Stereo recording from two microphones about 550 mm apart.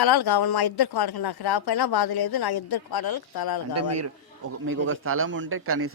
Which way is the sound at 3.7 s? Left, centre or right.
Right.